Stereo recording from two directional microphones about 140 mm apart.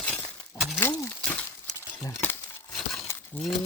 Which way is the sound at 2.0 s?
15° left (ahead or behind).